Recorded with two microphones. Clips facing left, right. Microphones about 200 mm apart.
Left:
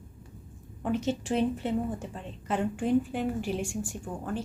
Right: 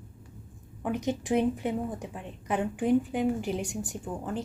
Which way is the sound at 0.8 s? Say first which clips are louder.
Even; 15° right (ahead or behind).